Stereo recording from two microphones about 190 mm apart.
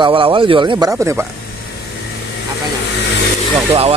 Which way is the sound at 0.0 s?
25° right (ahead or behind).